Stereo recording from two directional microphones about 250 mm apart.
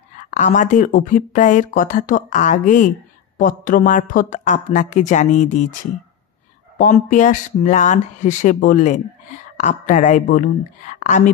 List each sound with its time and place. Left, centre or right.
0.2 s a woman's voice: left
6.8 s a woman's voice: left